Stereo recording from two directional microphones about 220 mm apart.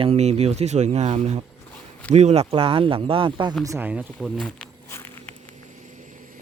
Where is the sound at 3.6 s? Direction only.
10° right (ahead or behind).